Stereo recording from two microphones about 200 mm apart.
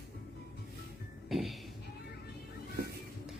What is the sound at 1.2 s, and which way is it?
Music, centre (ahead or behind).